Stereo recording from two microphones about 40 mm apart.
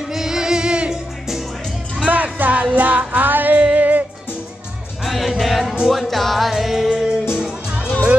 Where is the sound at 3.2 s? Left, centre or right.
Right.